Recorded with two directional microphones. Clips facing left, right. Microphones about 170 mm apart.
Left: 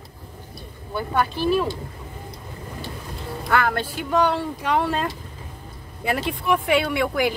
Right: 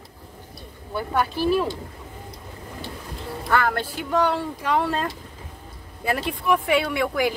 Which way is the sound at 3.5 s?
15° left (ahead or behind).